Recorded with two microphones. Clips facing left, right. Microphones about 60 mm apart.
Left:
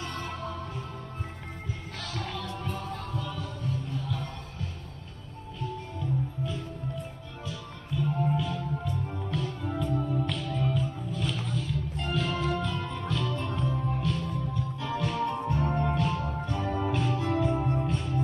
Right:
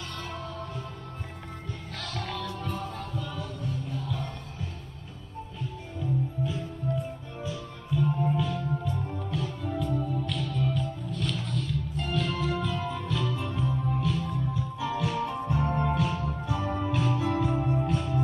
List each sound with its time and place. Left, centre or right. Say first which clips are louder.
2.0 s music: right 1 dB; centre
2.6 s heart sounds: right 1 dB; centre
5.9 s music: right 4 dB; centre